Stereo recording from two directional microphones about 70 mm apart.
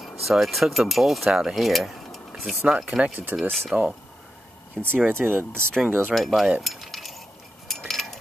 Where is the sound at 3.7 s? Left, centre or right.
Centre.